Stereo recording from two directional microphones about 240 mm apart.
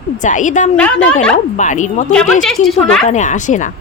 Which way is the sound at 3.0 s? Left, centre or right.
Left.